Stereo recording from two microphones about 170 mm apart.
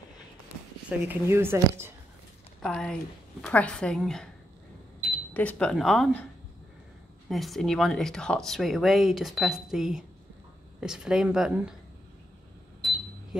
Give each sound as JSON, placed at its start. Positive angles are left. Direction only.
{"t": 0.8, "sound": "speech", "side_deg": -15}
{"t": 2.6, "sound": "speech", "side_deg": 5}
{"t": 5.3, "sound": "speech", "side_deg": 10}
{"t": 7.2, "sound": "speech", "side_deg": 0}